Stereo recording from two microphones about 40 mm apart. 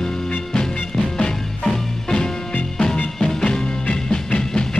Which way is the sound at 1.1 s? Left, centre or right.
Left.